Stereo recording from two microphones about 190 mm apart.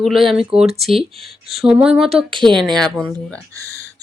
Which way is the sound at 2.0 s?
30° right (ahead or behind).